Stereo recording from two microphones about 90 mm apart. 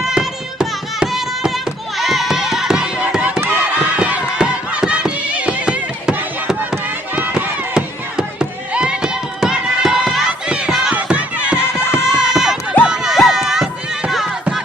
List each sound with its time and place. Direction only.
0.0 s music: 5° right (ahead or behind)
2.0 s crowd: centre (ahead or behind)
3.4 s run: 25° right (ahead or behind)
3.9 s music: 10° right (ahead or behind)
7.2 s run: 15° right (ahead or behind)
12.0 s a sound: 10° right (ahead or behind)